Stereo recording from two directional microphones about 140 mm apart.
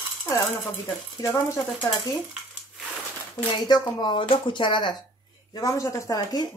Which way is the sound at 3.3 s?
30° left (ahead or behind).